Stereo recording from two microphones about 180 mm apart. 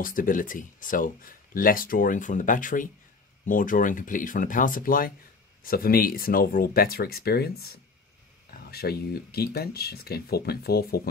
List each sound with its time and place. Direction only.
0.0 s speech: 50° left (ahead or behind)